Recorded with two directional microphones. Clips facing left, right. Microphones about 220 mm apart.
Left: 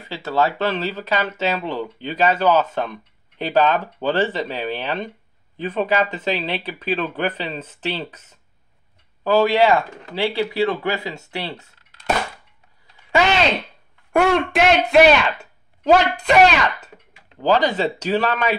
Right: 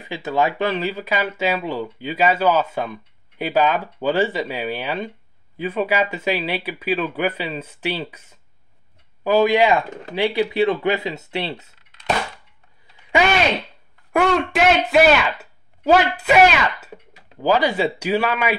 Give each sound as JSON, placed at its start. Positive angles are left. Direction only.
{"t": 0.0, "sound": "speech", "side_deg": -15}
{"t": 14.1, "sound": "speech", "side_deg": 0}
{"t": 17.4, "sound": "speech", "side_deg": -10}